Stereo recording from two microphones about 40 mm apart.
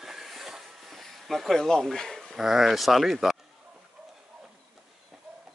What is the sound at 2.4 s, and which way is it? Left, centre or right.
Speech, centre.